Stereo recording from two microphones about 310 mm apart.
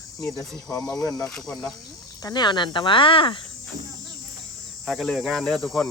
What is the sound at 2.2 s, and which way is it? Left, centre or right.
Speech, centre.